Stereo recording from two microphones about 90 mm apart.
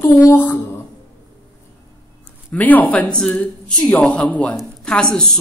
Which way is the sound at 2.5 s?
20° left (ahead or behind).